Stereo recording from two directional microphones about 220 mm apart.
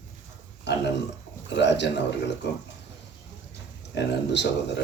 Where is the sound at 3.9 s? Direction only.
50° left (ahead or behind).